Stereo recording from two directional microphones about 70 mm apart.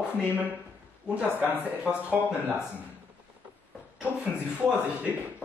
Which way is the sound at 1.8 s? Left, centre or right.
Right.